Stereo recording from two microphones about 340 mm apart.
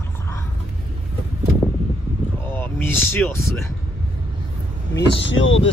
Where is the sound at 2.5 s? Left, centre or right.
Centre.